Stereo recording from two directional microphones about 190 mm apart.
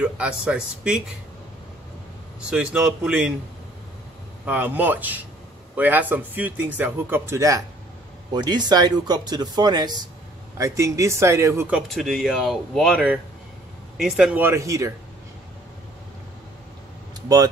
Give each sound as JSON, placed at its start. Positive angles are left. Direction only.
{"t": 0.0, "sound": "speech", "side_deg": -5}
{"t": 2.5, "sound": "speech", "side_deg": -5}
{"t": 4.5, "sound": "speech", "side_deg": -10}